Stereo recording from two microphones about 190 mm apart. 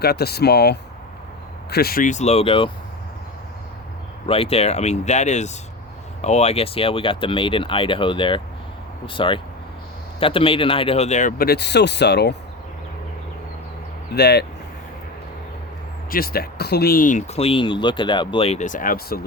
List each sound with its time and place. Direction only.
0.0 s speech: 55° left (ahead or behind); by 2.7 s 30° left (ahead or behind)
4.3 s speech: 30° left (ahead or behind); by 12.4 s 65° left (ahead or behind)
14.2 s speech: 60° left (ahead or behind)
16.0 s speech: 50° left (ahead or behind)